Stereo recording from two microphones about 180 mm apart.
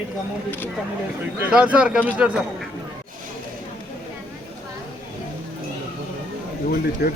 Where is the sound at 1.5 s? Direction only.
5° right (ahead or behind).